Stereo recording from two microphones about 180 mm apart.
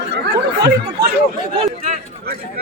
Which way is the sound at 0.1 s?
70° right (ahead or behind).